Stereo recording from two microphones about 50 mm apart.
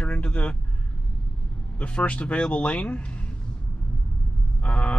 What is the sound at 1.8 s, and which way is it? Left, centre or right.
Speech, left.